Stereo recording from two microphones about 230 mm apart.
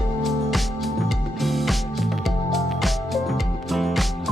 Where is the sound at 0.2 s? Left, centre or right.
Centre.